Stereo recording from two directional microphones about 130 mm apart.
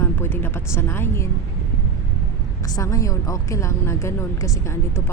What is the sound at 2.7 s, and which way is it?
A woman's voice, 25° left (ahead or behind).